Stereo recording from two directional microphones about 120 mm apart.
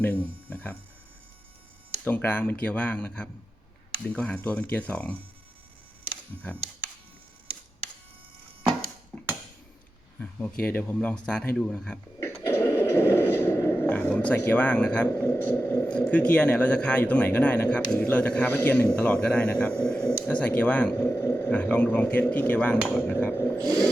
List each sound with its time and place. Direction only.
0.5 s a man's voice: 15° left (ahead or behind)
2.0 s a man's voice: 15° left (ahead or behind)
10.2 s a man's voice: 10° left (ahead or behind)
12.4 s a man's voice: 20° left (ahead or behind)
23.6 s a sound: 30° right (ahead or behind)